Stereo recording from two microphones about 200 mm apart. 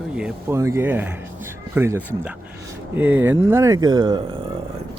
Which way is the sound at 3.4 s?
15° right (ahead or behind).